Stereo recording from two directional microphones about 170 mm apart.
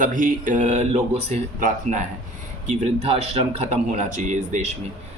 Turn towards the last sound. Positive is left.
turn(degrees=-45)  # may be behind; listen again after turning